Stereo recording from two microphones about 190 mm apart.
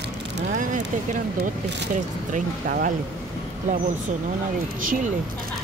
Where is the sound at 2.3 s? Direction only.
50° right (ahead or behind).